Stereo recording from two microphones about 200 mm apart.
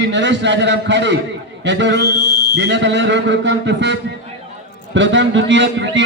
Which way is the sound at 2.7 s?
60° right (ahead or behind).